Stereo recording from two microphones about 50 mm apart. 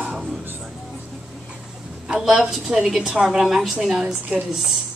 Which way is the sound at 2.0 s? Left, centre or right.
Centre.